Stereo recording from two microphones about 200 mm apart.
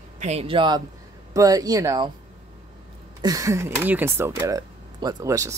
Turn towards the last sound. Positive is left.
turn(degrees=-15)  # may be behind; listen again after turning